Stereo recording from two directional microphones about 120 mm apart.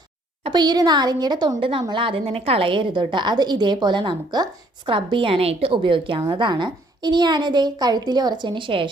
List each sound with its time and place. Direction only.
0.4 s a woman's voice: 35° right (ahead or behind)